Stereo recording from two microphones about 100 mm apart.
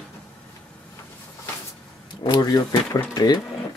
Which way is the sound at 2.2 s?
45° left (ahead or behind).